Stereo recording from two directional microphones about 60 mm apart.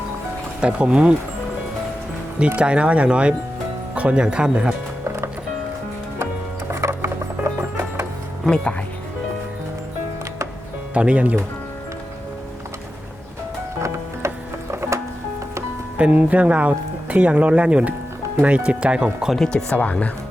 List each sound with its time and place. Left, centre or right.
0.6 s speech: centre
2.6 s speech: centre
5.0 s music: right
6.7 s music: right
8.4 s speech: centre
10.9 s speech: right
14.3 s music: right
16.0 s speech: right
19.7 s speech: left